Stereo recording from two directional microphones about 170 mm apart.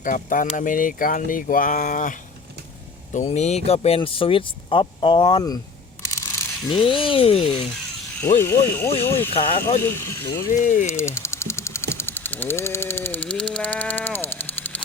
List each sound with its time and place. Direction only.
0.0 s speech: 50° left (ahead or behind)
3.2 s speech: 40° left (ahead or behind); by 5.5 s 25° left (ahead or behind)
6.1 s a sound: 15° left (ahead or behind)
6.8 s speech: 30° left (ahead or behind)
8.2 s speech: 15° left (ahead or behind)
10.6 s speech: 50° left (ahead or behind)
10.8 s a sound: 15° left (ahead or behind)